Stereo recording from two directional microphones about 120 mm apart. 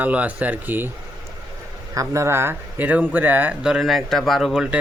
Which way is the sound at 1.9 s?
25° right (ahead or behind).